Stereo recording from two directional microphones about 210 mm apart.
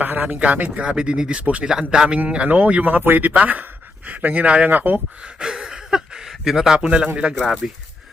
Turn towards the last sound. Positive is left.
turn(degrees=0)  # may be behind; listen again after turning